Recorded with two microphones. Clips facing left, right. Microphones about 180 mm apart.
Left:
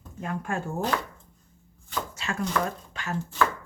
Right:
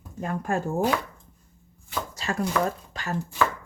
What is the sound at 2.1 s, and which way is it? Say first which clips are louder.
Chopping: right 3 dB; 35° right (ahead or behind).